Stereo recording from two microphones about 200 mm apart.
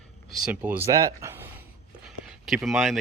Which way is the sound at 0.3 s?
5° right (ahead or behind).